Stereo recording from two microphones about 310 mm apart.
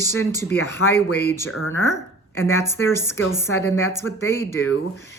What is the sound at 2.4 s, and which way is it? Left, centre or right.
Speech, centre.